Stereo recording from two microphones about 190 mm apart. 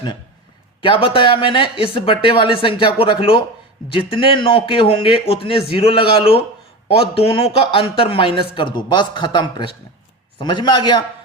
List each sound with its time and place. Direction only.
0.8 s a man's voice: 30° left (ahead or behind)